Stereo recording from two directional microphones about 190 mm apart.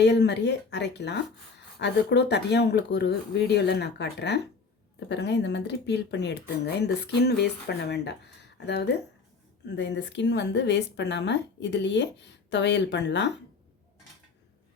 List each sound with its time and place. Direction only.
0.0 s a woman's voice: 65° left (ahead or behind)